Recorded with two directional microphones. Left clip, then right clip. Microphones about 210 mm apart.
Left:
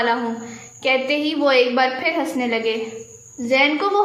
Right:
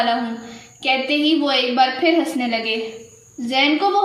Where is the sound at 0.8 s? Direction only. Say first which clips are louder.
Right 1 dB; 40° left (ahead or behind).